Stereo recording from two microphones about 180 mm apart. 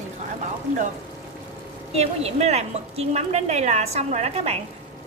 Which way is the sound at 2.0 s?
35° right (ahead or behind).